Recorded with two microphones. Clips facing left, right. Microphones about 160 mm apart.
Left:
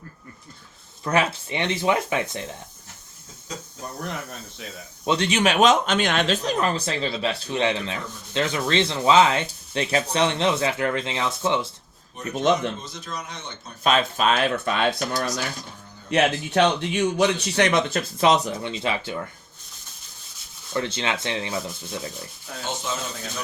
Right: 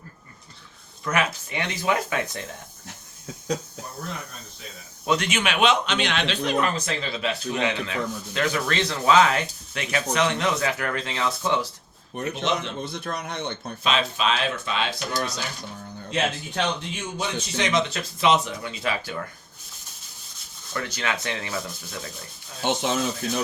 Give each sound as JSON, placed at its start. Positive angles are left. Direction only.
{"t": 1.0, "sound": "speech", "side_deg": 30}
{"t": 5.0, "sound": "speech", "side_deg": 30}
{"t": 12.3, "sound": "speech", "side_deg": 50}
{"t": 12.8, "sound": "a man's voice", "side_deg": -60}
{"t": 13.8, "sound": "speech", "side_deg": 50}
{"t": 16.0, "sound": "a man's voice", "side_deg": 70}
{"t": 18.2, "sound": "speech", "side_deg": 40}
{"t": 18.6, "sound": "speech", "side_deg": 25}
{"t": 20.7, "sound": "speech", "side_deg": 25}
{"t": 22.6, "sound": "speech", "side_deg": -75}